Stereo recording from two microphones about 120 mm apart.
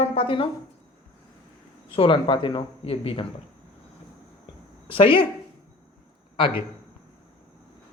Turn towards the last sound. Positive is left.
turn(degrees=45)  # may be behind; listen again after turning